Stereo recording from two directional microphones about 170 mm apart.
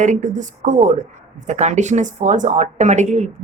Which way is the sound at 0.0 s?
45° right (ahead or behind).